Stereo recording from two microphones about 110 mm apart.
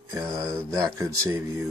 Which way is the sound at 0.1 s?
30° right (ahead or behind).